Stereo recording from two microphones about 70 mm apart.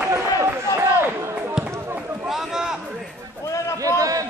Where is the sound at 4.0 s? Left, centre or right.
Right.